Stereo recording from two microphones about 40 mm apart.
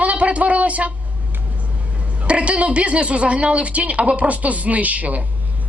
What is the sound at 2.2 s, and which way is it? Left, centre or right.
A woman's voice, right.